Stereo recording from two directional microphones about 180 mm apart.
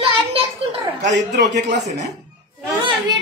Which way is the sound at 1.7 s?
40° right (ahead or behind).